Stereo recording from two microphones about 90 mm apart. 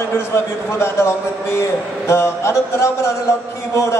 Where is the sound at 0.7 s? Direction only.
30° left (ahead or behind).